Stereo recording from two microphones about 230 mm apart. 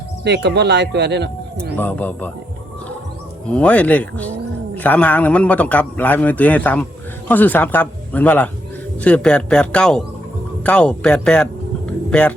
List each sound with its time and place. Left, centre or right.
0.3 s speech: right
1.7 s speech: centre
3.5 s a man's voice: centre